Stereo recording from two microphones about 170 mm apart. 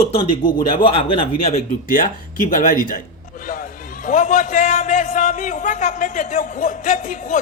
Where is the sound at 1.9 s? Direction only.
55° left (ahead or behind).